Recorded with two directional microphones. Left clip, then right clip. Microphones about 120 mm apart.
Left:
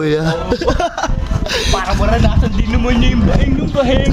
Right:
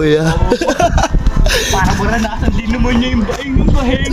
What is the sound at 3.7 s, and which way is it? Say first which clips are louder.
Speech: left 6 dB; 40° left (ahead or behind).